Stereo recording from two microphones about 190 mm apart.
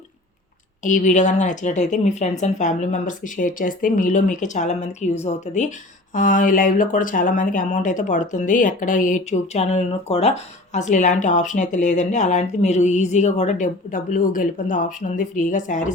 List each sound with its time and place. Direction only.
0.9 s speech: 40° left (ahead or behind)